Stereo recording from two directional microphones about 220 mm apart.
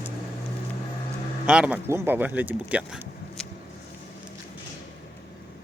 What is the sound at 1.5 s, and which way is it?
Speech, 5° right (ahead or behind).